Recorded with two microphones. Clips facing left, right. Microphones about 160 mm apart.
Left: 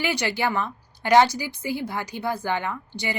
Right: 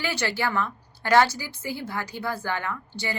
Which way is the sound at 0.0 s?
15° left (ahead or behind).